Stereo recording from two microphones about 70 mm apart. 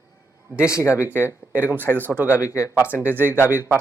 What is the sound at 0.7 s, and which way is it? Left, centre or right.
Speech, left.